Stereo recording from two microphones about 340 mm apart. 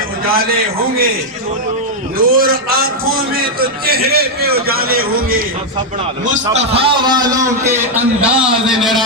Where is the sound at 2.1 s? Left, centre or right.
Right.